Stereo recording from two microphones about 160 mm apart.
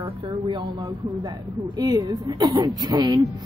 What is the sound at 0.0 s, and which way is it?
A woman's voice, 30° right (ahead or behind).